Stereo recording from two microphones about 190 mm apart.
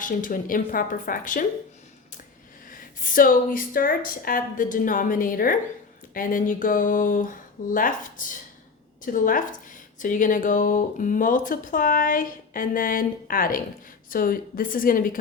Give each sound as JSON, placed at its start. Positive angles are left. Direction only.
{"t": 0.0, "sound": "speech", "side_deg": 45}
{"t": 2.6, "sound": "speech", "side_deg": 45}